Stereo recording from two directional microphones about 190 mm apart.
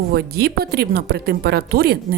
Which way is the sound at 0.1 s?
55° right (ahead or behind).